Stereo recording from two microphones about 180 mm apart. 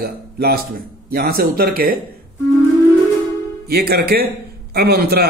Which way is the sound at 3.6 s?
60° right (ahead or behind).